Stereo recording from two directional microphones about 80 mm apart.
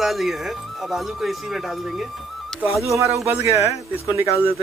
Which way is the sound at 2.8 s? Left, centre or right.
Right.